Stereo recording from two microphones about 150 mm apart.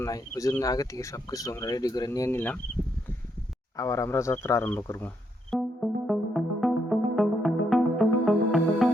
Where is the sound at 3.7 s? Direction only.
20° left (ahead or behind).